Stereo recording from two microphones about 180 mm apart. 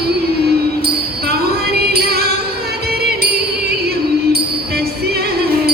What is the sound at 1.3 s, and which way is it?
Music, 60° right (ahead or behind).